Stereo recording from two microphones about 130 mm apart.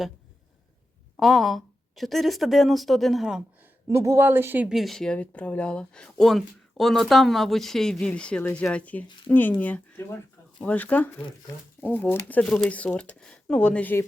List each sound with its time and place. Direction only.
1.1 s a woman's voice: centre (ahead or behind)
3.8 s speech: 25° right (ahead or behind)
4.7 s speech: centre (ahead or behind)